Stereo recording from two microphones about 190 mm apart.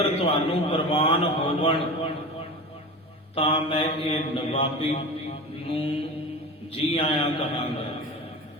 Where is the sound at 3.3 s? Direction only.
30° left (ahead or behind).